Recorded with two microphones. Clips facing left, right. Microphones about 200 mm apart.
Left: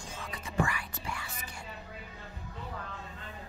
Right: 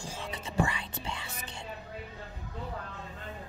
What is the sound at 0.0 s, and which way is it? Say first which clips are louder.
Music: right 3 dB; 30° right (ahead or behind).